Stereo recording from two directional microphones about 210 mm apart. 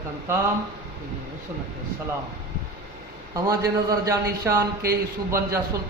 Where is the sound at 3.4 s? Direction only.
15° right (ahead or behind).